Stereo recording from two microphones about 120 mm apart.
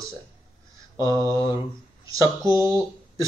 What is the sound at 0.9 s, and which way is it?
Mantra, 25° right (ahead or behind).